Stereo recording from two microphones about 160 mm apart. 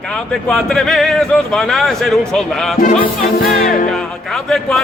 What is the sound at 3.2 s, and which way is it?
Music, 50° left (ahead or behind).